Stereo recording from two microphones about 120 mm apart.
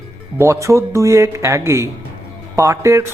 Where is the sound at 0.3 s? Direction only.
25° right (ahead or behind).